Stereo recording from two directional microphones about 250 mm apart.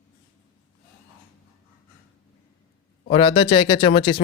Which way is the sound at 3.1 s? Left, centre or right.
Left.